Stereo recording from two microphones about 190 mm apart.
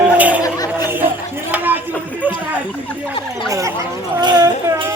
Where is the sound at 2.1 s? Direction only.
10° right (ahead or behind).